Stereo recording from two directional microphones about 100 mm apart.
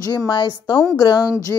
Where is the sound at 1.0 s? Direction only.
45° left (ahead or behind).